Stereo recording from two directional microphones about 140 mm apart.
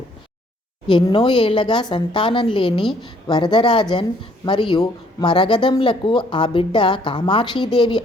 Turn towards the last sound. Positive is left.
turn(degrees=35)  # may be behind; listen again after turning